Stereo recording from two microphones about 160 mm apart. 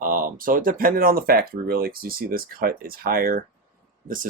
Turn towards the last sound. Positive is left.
turn(degrees=-60)  # may be behind; listen again after turning